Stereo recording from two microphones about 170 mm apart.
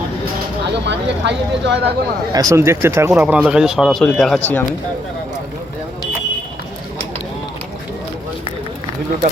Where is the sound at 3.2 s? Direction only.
5° right (ahead or behind).